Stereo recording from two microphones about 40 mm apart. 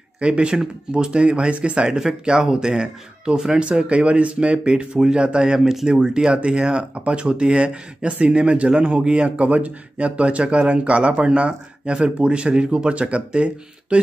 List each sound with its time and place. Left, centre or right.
0.2 s speech: right
1.9 s speech: centre
5.6 s speech: centre
5.9 s speech: right